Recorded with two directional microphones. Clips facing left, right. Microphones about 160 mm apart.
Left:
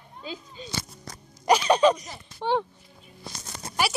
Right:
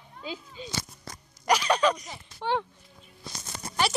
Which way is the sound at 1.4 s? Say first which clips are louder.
Left 4 dB; 25° left (ahead or behind).